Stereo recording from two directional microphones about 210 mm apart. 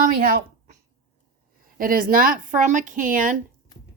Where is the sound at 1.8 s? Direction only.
40° right (ahead or behind).